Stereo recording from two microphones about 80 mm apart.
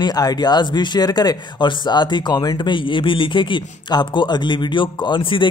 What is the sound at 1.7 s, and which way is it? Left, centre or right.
Speech, left.